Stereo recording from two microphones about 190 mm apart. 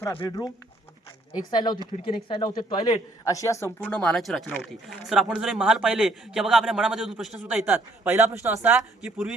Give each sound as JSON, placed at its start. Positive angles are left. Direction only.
{"t": 0.2, "sound": "a man's voice", "side_deg": 20}